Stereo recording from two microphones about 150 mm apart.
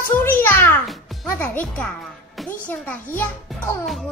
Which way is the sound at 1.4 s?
10° left (ahead or behind).